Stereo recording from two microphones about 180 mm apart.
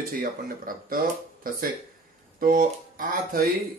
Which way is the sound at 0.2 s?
50° right (ahead or behind).